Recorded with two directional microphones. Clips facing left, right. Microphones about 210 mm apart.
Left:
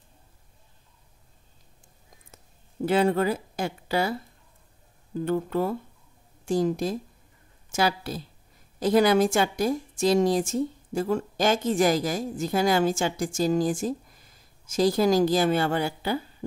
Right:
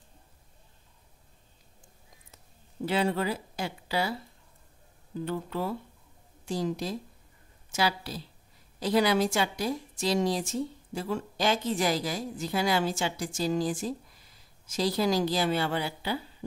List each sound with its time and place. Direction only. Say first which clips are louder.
2.3 s speech: left 5 dB; 50° left (ahead or behind)
5.2 s a woman's voice: left 7 dB; 50° left (ahead or behind)